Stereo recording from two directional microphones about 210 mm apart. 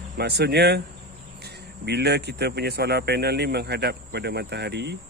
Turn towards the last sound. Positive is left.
turn(degrees=-50)  # may be behind; listen again after turning